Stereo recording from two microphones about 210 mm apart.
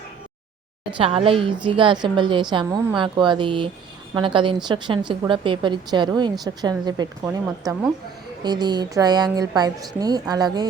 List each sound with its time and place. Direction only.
0.9 s a woman's voice: 25° right (ahead or behind)